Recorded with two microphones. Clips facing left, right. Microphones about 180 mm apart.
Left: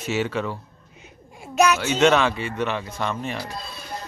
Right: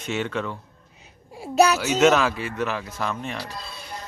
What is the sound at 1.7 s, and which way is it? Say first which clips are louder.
A man's voice: even; 5° right (ahead or behind).